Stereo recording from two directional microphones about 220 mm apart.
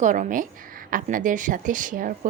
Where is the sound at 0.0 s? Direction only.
35° right (ahead or behind).